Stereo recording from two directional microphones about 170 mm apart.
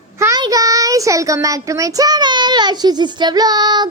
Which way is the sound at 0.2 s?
20° right (ahead or behind).